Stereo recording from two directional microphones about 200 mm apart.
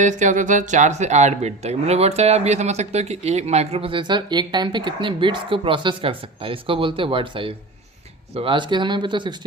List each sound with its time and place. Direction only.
0.0 s speech: 40° right (ahead or behind)